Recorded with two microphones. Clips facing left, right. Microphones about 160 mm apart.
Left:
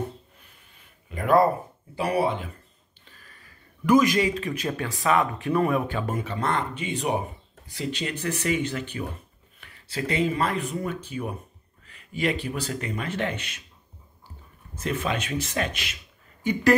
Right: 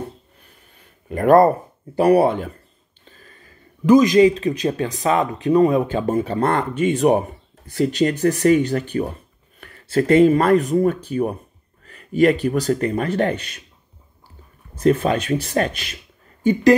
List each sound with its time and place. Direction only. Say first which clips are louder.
1.0 s speech: right 7 dB; 50° right (ahead or behind)
3.1 s a sound: right 6 dB; 25° right (ahead or behind)
4.2 s speech: right 11 dB; 20° right (ahead or behind)
5.9 s speech: right 9 dB; 35° right (ahead or behind)
6.5 s speech: right 9 dB; 50° right (ahead or behind)
15.0 s speech: right 8 dB; 35° right (ahead or behind)